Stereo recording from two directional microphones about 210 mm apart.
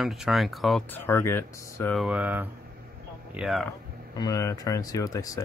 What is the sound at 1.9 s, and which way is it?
Speech, 5° right (ahead or behind).